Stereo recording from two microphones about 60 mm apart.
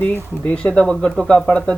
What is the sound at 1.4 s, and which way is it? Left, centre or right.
Speech, centre.